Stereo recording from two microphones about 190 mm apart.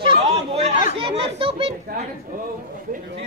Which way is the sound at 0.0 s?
35° right (ahead or behind).